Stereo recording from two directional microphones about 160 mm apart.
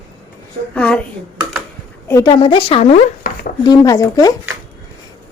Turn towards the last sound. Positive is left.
turn(degrees=20)  # may be behind; listen again after turning